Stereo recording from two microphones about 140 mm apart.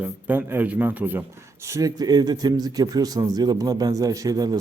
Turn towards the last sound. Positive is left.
turn(degrees=-25)  # may be behind; listen again after turning